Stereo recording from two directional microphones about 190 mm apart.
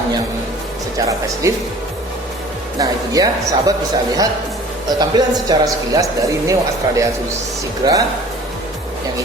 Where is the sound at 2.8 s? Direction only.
20° right (ahead or behind).